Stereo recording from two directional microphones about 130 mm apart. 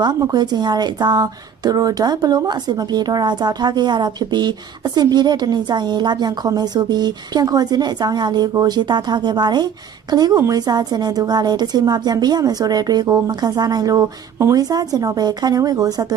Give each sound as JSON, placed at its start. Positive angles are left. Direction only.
{"t": 0.0, "sound": "a woman's voice", "side_deg": -30}